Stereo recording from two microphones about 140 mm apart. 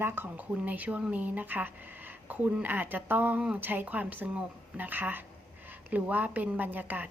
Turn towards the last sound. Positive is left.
turn(degrees=-10)  # may be behind; listen again after turning